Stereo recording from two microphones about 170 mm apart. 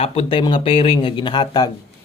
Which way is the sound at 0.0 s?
35° left (ahead or behind).